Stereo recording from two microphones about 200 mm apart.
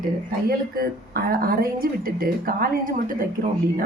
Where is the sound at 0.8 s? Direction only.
50° right (ahead or behind).